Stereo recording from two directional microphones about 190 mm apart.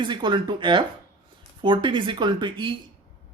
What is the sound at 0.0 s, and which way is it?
Speech, 25° right (ahead or behind).